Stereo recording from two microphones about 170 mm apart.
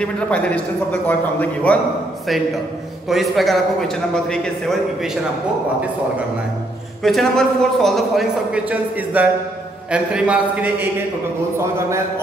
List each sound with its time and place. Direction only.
0.0 s a man's voice: 5° left (ahead or behind)
3.1 s a man's voice: centre (ahead or behind)
7.0 s a man's voice: centre (ahead or behind); by 12.0 s 15° right (ahead or behind)